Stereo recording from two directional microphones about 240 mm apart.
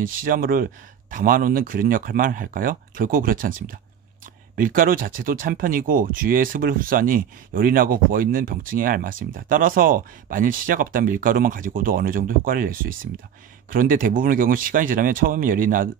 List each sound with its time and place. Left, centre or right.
0.0 s speech: right